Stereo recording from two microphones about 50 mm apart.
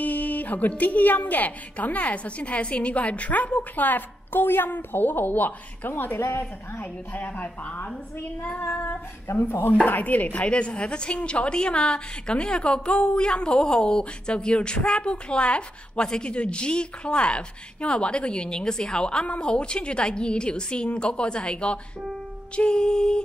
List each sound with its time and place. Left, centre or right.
0.0 s a woman's voice: left
6.8 s a woman's voice: left
8.8 s speech: left
9.8 s speech: left